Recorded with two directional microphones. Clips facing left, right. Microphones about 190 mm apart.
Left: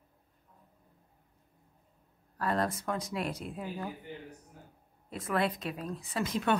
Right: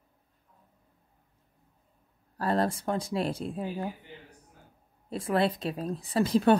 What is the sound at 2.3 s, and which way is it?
Speech, 30° right (ahead or behind).